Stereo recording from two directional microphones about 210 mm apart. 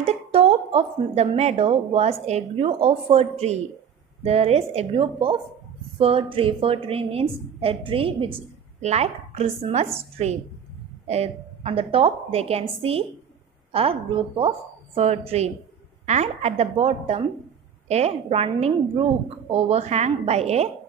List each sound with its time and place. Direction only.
0.0 s speech: 30° right (ahead or behind)
11.1 s a woman's voice: 30° right (ahead or behind)